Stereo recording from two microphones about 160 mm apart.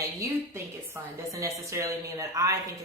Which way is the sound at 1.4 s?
20° right (ahead or behind).